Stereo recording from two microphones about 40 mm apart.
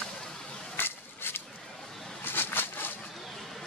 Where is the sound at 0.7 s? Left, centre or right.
Left.